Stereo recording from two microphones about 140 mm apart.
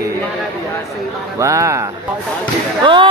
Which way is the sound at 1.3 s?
20° right (ahead or behind).